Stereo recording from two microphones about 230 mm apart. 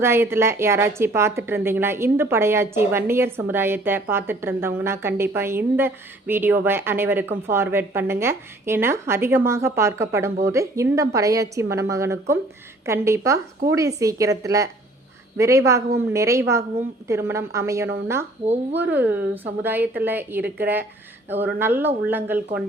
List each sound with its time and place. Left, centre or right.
0.0 s a woman's voice: centre